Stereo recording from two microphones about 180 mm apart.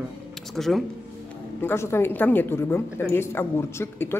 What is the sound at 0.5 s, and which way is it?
Speech, centre (ahead or behind).